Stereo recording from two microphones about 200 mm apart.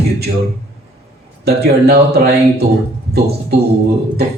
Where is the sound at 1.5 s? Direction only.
50° right (ahead or behind).